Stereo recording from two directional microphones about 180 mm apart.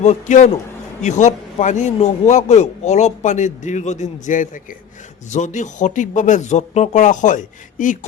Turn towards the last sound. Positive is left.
turn(degrees=45)  # may be behind; listen again after turning